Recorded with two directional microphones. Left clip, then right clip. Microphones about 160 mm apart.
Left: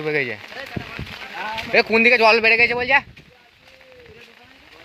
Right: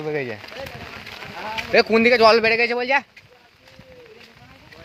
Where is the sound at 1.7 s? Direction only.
20° right (ahead or behind).